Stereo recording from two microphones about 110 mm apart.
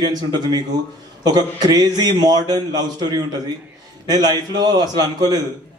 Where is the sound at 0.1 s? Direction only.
40° right (ahead or behind).